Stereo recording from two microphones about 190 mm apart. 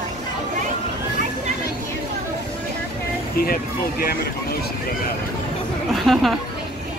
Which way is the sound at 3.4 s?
50° left (ahead or behind).